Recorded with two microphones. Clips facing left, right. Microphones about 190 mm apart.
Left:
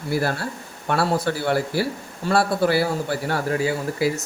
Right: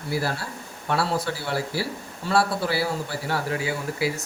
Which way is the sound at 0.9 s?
55° left (ahead or behind).